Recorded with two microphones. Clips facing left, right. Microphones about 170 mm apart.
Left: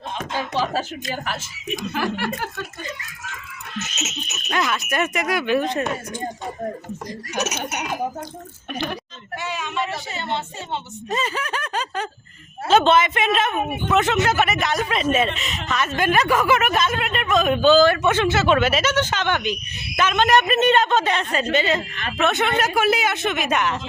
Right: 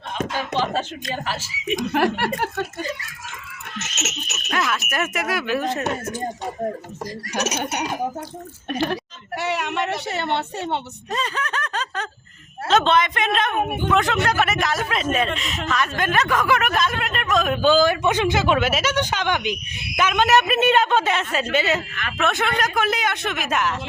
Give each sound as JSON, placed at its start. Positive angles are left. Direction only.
{"t": 0.3, "sound": "speech", "side_deg": 10}
{"t": 1.9, "sound": "speech", "side_deg": -65}
{"t": 3.8, "sound": "speech", "side_deg": -80}
{"t": 4.4, "sound": "speech", "side_deg": 0}
{"t": 7.4, "sound": "speech", "side_deg": -35}
{"t": 8.9, "sound": "speech", "side_deg": -70}
{"t": 11.1, "sound": "speech", "side_deg": 5}
{"t": 17.6, "sound": "speech", "side_deg": -10}